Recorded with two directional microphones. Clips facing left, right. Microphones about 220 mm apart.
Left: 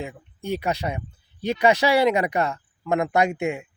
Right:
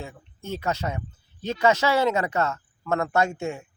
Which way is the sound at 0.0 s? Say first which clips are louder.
Left 5 dB; 15° left (ahead or behind).